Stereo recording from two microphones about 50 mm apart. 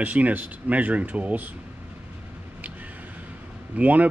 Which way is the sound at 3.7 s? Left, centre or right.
Right.